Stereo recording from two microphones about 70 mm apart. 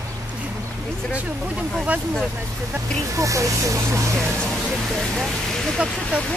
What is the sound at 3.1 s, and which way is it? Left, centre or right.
Speech, right.